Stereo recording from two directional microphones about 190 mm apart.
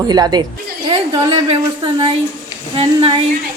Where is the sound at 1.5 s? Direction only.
25° right (ahead or behind).